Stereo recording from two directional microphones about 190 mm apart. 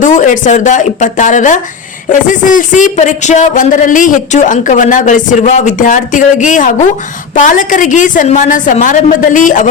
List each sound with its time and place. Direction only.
0.0 s a woman's voice: 40° left (ahead or behind)